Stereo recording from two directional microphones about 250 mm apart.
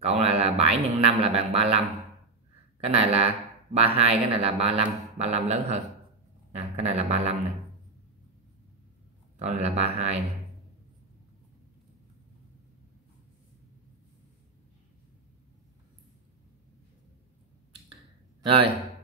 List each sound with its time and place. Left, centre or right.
0.0 s a man's voice: right
2.8 s a man's voice: right
6.8 s a man's voice: right
9.4 s a man's voice: right
18.4 s speech: right